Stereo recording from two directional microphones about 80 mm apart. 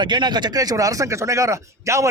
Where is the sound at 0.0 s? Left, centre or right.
Right.